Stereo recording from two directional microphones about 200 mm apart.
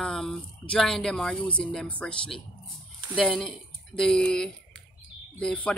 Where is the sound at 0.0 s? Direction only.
Centre (ahead or behind).